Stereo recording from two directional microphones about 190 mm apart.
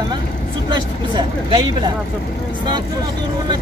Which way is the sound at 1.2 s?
25° right (ahead or behind).